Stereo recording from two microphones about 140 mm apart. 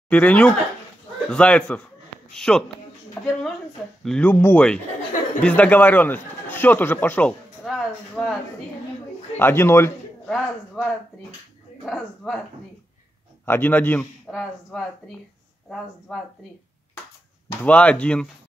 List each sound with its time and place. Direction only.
0.1 s speech: 10° left (ahead or behind)
9.4 s a man's voice: 20° left (ahead or behind)
10.2 s speech: 5° left (ahead or behind)
13.5 s speech: 15° left (ahead or behind)
17.6 s speech: 10° left (ahead or behind)